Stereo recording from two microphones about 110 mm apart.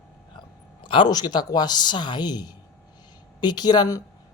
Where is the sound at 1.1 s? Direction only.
40° left (ahead or behind).